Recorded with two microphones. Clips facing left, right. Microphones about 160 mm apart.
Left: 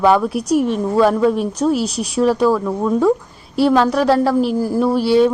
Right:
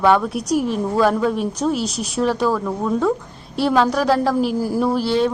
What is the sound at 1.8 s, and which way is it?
Speech, 35° left (ahead or behind).